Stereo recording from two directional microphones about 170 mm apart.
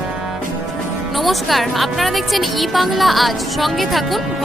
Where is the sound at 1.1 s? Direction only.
Centre (ahead or behind).